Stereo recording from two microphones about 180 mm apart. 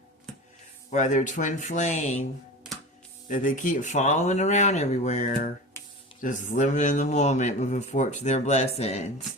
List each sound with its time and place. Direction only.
0.3 s a sound: centre (ahead or behind)
0.9 s speech: 45° left (ahead or behind)
3.2 s speech: 45° left (ahead or behind)